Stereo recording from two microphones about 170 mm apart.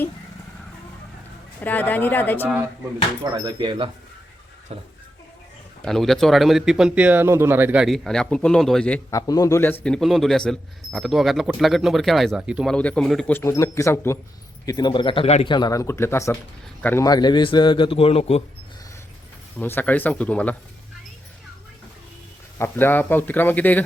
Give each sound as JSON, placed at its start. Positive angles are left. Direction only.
{"t": 1.6, "sound": "a man's voice", "side_deg": 10}
{"t": 3.3, "sound": "speech", "side_deg": -25}
{"t": 5.8, "sound": "speech", "side_deg": 0}
{"t": 9.0, "sound": "speech", "side_deg": 20}
{"t": 9.8, "sound": "speech", "side_deg": 5}
{"t": 12.7, "sound": "a man's voice", "side_deg": 5}
{"t": 19.5, "sound": "a man's voice", "side_deg": 10}
{"t": 22.5, "sound": "a man's voice", "side_deg": 15}